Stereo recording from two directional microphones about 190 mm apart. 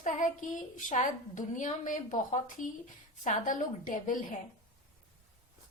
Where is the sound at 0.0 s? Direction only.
40° left (ahead or behind).